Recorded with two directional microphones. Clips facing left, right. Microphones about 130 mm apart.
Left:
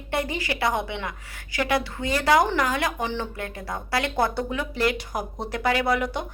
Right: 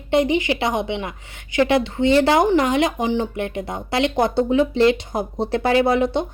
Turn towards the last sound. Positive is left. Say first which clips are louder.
# right 7 dB
turn(degrees=-25)  # may be behind; listen again after turning